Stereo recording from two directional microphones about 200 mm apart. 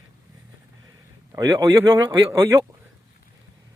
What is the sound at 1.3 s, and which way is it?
Speech, 15° right (ahead or behind).